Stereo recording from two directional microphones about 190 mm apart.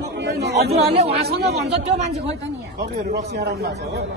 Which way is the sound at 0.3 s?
55° right (ahead or behind).